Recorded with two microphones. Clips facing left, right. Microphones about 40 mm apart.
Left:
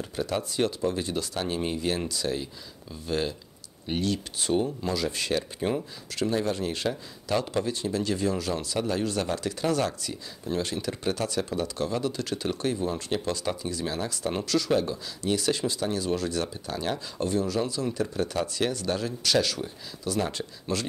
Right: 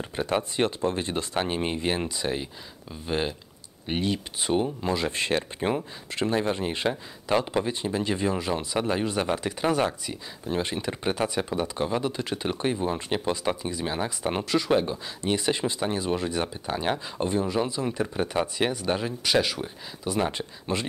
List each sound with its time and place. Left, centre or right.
0.1 s speech: right